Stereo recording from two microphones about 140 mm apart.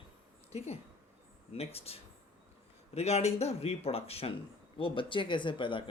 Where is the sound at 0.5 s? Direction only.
50° left (ahead or behind).